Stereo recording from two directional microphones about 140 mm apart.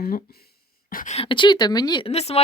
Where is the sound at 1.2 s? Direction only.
35° left (ahead or behind).